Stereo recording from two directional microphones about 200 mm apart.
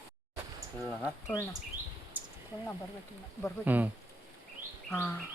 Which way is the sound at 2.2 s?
10° right (ahead or behind).